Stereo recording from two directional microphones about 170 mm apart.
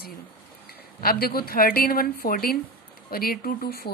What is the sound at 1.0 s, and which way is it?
Speech, 65° left (ahead or behind).